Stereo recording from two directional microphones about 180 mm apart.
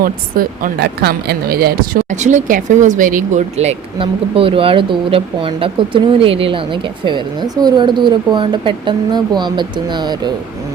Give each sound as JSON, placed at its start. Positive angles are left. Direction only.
{"t": 0.0, "sound": "speech", "side_deg": -50}